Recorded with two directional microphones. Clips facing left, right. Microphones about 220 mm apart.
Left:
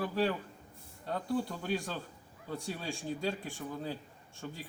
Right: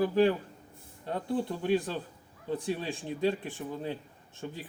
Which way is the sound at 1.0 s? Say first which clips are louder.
Right 2 dB; 25° right (ahead or behind).